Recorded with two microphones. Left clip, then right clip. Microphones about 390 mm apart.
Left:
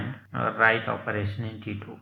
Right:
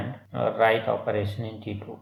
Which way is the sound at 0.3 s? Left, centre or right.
Right.